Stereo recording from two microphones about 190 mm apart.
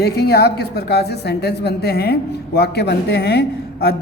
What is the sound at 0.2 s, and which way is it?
A woman's voice, 60° left (ahead or behind).